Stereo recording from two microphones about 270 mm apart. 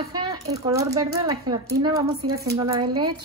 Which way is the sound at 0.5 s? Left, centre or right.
Centre.